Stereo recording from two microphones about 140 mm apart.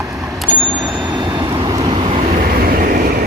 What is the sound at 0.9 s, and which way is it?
Vehicle, 30° right (ahead or behind).